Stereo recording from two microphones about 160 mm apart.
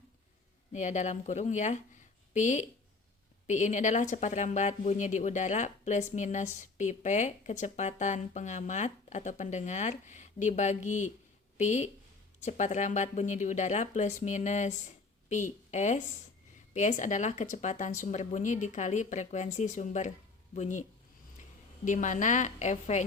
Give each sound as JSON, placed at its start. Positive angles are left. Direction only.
{"t": 0.7, "sound": "speech", "side_deg": 50}
{"t": 21.8, "sound": "speech", "side_deg": 50}